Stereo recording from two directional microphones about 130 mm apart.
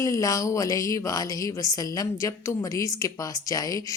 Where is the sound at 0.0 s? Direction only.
25° left (ahead or behind).